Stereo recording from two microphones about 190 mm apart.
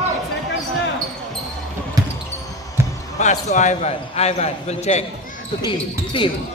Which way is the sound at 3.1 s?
40° left (ahead or behind).